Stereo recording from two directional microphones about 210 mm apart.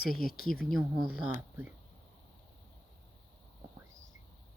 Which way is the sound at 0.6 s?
Centre (ahead or behind).